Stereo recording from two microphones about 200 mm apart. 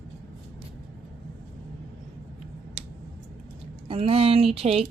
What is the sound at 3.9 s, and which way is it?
Speech, 30° right (ahead or behind).